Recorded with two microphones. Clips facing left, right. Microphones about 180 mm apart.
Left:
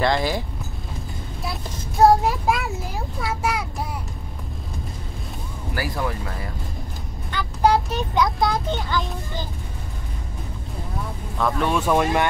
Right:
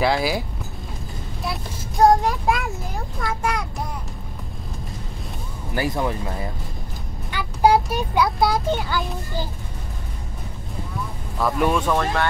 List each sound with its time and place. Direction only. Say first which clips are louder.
0.0 s speech: right 1 dB; 5° right (ahead or behind)
1.4 s child singing: right 2 dB; centre (ahead or behind)
3.2 s speech: even; 5° left (ahead or behind)
5.8 s speech: right 4 dB; 20° right (ahead or behind)
7.2 s speech: right 2 dB; 10° right (ahead or behind)
11.3 s speech: right 2 dB; 5° right (ahead or behind)
11.7 s speech: left 2 dB; 10° left (ahead or behind)